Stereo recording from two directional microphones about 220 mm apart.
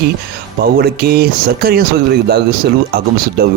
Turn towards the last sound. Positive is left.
turn(degrees=-45)  # may be behind; listen again after turning